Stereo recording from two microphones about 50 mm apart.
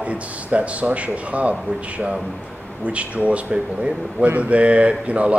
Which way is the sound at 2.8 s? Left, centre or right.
Right.